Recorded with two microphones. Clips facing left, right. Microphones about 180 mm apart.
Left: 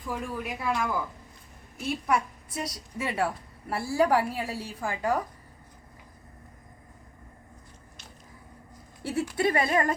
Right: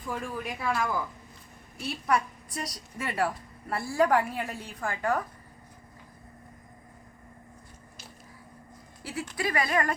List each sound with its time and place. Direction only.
0.1 s a woman's voice: 5° left (ahead or behind)
9.4 s speech: 25° left (ahead or behind)